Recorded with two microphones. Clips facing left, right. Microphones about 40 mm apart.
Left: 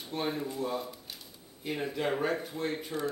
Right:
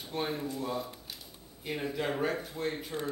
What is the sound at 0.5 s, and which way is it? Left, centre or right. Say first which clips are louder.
A man's voice: left 1 dB; centre.